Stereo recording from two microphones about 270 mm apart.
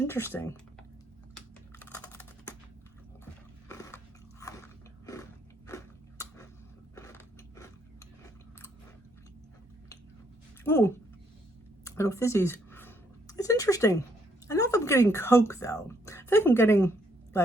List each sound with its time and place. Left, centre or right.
0.0 s speech: centre
1.8 s typing: centre
3.7 s biting: centre
5.0 s a sound: centre
10.6 s speech: centre
11.9 s a sound: centre
14.4 s speech: centre